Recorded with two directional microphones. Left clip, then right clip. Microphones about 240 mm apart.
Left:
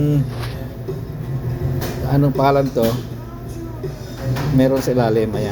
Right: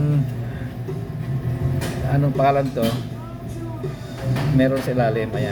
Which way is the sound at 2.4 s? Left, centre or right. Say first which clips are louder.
Left 2 dB; centre.